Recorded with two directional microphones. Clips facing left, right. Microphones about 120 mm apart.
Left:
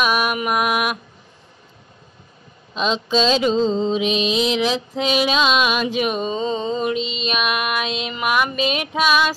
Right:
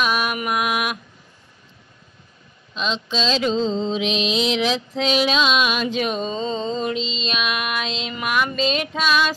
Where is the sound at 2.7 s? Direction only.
40° left (ahead or behind).